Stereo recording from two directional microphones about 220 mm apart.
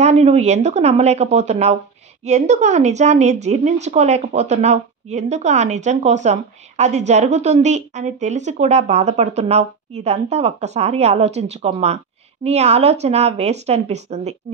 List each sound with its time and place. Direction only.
0.0 s a woman's voice: 30° right (ahead or behind)